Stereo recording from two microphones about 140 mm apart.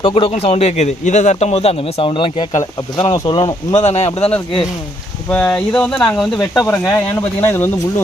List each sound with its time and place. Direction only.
0.0 s speech: 40° left (ahead or behind)
3.8 s speech: 50° left (ahead or behind)
5.3 s speech: 10° left (ahead or behind)
6.7 s speech: 15° left (ahead or behind)